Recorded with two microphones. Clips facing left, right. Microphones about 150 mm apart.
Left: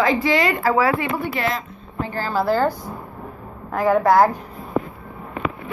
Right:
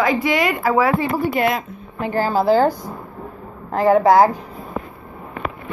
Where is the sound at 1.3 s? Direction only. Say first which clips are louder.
Right 5 dB; 55° right (ahead or behind).